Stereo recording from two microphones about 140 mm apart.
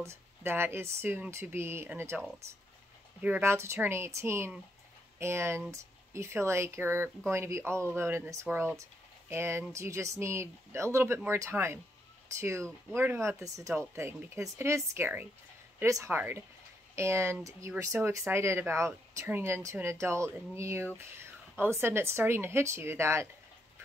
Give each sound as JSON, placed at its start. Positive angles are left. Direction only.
{"t": 0.0, "sound": "speech", "side_deg": -15}